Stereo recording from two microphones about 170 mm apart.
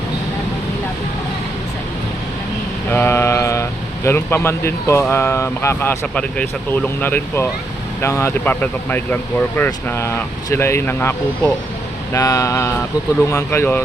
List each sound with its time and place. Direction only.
2.9 s speech: 10° left (ahead or behind)